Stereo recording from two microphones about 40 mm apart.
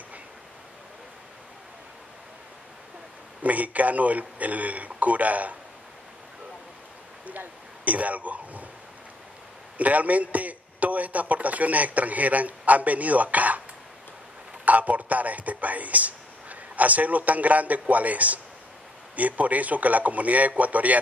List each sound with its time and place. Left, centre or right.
3.4 s a man's voice: right
7.2 s speech: right
9.8 s a man's voice: right
14.6 s a man's voice: right